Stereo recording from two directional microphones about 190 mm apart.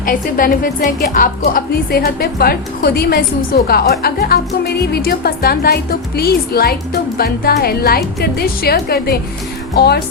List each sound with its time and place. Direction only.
0.0 s a woman's voice: 45° left (ahead or behind)